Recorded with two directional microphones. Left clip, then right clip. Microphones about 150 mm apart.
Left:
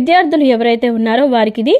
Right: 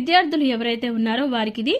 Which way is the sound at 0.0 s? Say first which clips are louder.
Left 7 dB; 20° left (ahead or behind).